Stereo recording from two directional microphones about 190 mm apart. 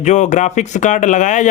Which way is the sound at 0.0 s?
40° left (ahead or behind).